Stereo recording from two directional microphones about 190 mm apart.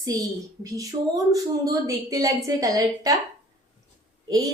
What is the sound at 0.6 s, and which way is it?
A woman's voice, 20° right (ahead or behind).